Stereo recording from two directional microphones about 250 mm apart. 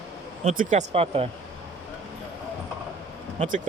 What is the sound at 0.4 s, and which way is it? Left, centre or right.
Speech, right.